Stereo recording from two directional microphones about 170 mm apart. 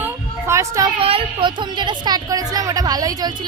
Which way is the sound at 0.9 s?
35° right (ahead or behind).